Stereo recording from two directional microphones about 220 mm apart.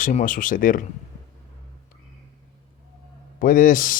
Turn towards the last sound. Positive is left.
turn(degrees=40)  # may be behind; listen again after turning